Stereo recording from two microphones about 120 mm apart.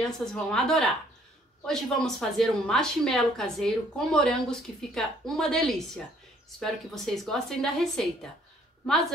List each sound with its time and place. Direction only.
0.0 s a woman's voice: 5° left (ahead or behind)